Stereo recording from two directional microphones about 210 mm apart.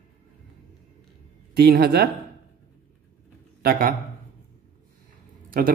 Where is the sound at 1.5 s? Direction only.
50° right (ahead or behind).